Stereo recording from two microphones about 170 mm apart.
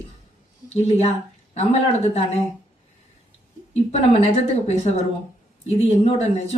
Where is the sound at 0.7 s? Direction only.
40° left (ahead or behind).